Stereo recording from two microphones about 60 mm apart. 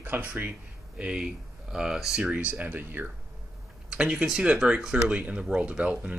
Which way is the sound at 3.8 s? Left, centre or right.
Centre.